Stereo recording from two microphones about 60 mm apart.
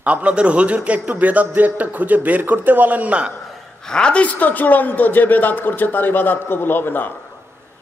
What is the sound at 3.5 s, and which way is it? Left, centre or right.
A man's voice, centre.